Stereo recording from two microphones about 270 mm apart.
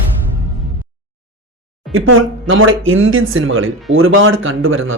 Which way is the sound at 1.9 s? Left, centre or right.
Right.